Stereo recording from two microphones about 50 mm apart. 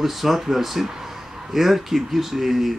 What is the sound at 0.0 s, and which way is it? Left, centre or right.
Speech, centre.